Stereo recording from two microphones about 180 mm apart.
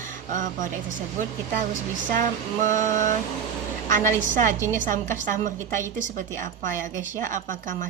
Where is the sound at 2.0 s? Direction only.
50° right (ahead or behind).